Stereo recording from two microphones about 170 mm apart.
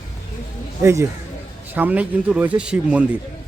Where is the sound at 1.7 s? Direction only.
10° right (ahead or behind).